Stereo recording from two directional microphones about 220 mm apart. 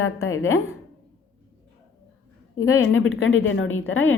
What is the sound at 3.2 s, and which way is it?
Speech, 65° left (ahead or behind).